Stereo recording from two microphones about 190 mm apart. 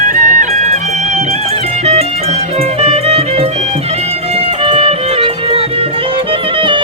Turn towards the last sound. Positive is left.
turn(degrees=-25)  # may be behind; listen again after turning